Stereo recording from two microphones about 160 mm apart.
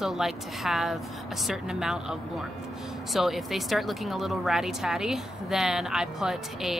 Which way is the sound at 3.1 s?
Centre (ahead or behind).